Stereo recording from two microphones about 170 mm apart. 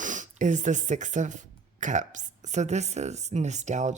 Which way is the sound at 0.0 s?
50° right (ahead or behind).